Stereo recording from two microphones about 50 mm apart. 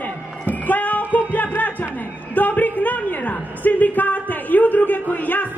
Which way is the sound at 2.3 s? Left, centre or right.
Left.